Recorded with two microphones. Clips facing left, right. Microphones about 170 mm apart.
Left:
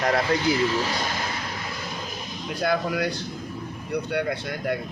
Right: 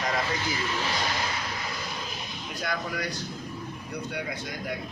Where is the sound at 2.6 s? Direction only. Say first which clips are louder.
Left 8 dB; 60° left (ahead or behind).